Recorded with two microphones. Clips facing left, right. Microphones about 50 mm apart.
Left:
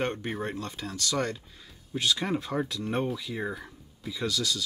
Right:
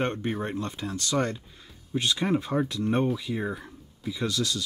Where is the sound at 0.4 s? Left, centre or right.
Right.